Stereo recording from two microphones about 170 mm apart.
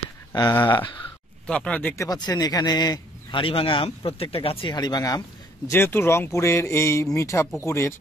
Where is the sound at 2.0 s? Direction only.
20° left (ahead or behind).